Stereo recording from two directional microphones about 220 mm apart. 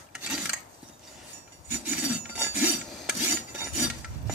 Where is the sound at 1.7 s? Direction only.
5° right (ahead or behind).